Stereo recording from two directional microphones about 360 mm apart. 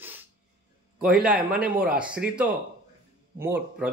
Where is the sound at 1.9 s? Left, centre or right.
Centre.